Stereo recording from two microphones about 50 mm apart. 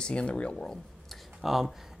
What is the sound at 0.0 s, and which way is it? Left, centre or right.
Speech, centre.